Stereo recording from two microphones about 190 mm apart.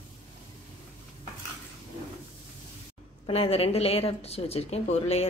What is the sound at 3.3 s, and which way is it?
A woman's voice, 30° left (ahead or behind).